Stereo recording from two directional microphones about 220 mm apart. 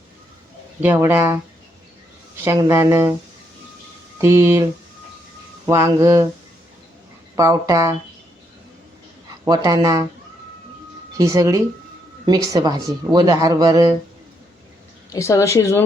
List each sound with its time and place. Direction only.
0.8 s speech: 10° right (ahead or behind)
2.4 s speech: 10° right (ahead or behind)
4.2 s speech: 10° right (ahead or behind)
7.3 s speech: 15° right (ahead or behind)
9.4 s speech: 15° right (ahead or behind)
11.2 s speech: 15° right (ahead or behind)
15.1 s a woman's voice: 15° left (ahead or behind)